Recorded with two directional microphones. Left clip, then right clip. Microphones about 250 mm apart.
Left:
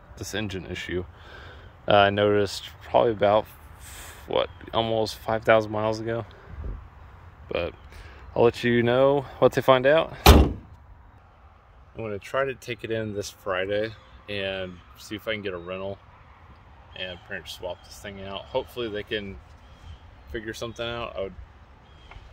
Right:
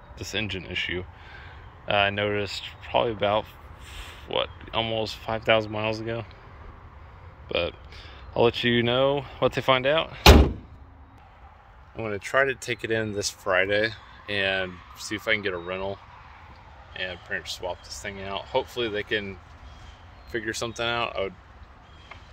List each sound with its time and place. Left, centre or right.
0.3 s speech: left
0.9 s speech: left
7.4 s speech: centre
12.0 s speech: centre